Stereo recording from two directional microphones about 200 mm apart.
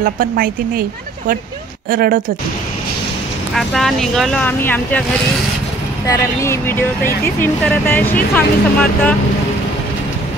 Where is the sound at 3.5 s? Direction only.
Centre (ahead or behind).